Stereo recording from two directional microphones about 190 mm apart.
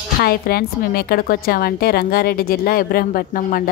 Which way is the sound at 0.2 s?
50° left (ahead or behind).